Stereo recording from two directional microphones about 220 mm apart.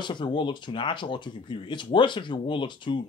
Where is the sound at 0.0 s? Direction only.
20° left (ahead or behind).